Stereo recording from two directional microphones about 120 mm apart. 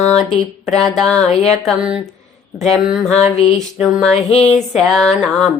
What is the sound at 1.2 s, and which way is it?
Music, 60° left (ahead or behind).